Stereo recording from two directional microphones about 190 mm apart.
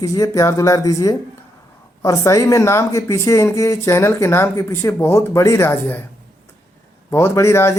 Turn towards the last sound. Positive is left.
turn(degrees=15)  # may be behind; listen again after turning